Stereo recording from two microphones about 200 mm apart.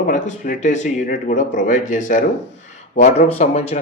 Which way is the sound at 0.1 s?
40° left (ahead or behind).